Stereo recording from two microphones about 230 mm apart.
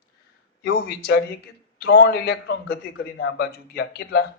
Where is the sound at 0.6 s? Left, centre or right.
Left.